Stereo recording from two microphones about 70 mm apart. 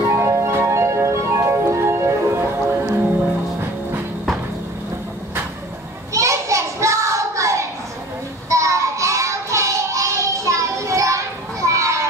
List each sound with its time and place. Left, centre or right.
0.1 s music: right
6.1 s child singing: right
8.5 s music: right